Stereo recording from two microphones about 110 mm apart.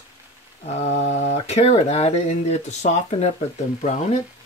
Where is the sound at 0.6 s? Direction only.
90° left.